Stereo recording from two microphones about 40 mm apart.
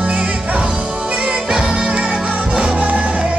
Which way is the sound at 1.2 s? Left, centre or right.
Right.